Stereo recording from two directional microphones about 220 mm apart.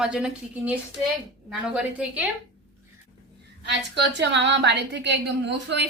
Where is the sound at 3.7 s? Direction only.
55° right (ahead or behind).